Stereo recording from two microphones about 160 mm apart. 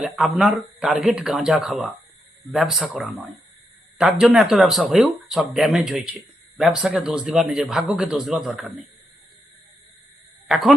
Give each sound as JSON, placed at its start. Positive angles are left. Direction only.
{"t": 0.0, "sound": "speech", "side_deg": -5}
{"t": 10.5, "sound": "speech", "side_deg": 0}